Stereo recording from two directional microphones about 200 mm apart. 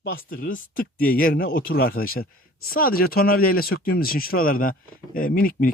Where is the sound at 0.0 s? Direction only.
50° left (ahead or behind).